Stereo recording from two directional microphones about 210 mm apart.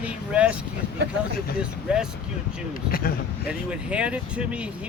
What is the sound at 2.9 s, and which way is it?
Speech, 45° left (ahead or behind).